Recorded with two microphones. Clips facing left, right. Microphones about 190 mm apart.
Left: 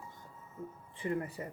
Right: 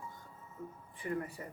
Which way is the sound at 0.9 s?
25° left (ahead or behind).